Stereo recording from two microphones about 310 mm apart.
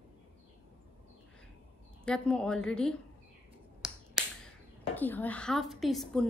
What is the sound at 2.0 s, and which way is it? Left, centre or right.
Speech, centre.